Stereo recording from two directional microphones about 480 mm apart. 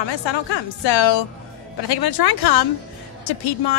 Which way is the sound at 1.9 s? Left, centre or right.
Left.